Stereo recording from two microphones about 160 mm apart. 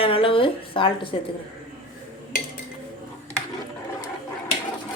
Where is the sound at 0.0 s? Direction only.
35° left (ahead or behind).